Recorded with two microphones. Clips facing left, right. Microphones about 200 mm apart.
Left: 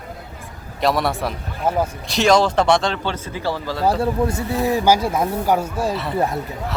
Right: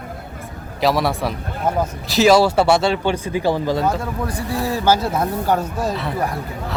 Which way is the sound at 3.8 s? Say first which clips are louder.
Left 3 dB; 30° left (ahead or behind).